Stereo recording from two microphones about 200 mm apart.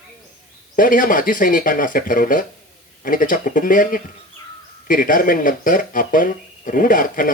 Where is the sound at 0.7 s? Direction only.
45° left (ahead or behind).